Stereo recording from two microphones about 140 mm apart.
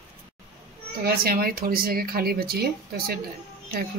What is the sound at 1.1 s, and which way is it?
Speech, 90° right.